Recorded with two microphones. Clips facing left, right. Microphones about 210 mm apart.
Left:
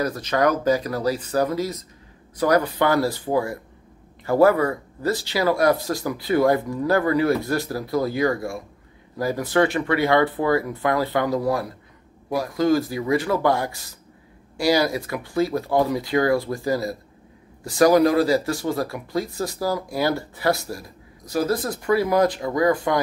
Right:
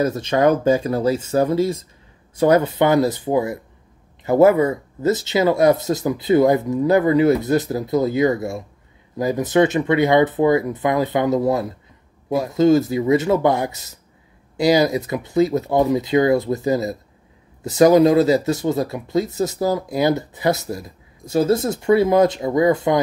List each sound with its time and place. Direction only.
0.0 s speech: 25° right (ahead or behind)